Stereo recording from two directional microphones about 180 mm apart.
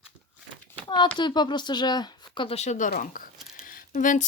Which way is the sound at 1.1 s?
25° left (ahead or behind).